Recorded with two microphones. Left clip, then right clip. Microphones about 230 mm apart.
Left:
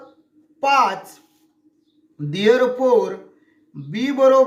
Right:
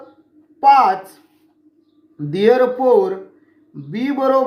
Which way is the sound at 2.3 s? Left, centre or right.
Left.